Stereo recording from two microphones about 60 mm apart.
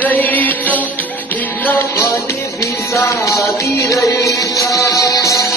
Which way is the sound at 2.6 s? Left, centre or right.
Left.